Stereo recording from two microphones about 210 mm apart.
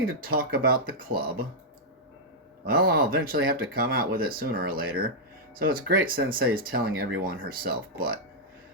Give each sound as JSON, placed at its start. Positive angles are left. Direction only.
{"t": 0.2, "sound": "speech", "side_deg": -45}
{"t": 2.6, "sound": "speech", "side_deg": -45}